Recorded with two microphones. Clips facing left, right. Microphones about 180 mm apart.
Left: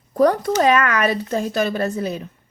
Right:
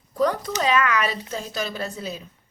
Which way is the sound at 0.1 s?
55° left (ahead or behind).